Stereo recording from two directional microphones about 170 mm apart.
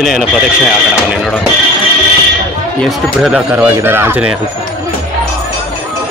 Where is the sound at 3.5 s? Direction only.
10° right (ahead or behind).